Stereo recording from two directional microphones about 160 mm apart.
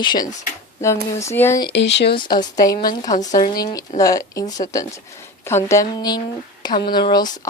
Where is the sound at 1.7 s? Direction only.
90° left.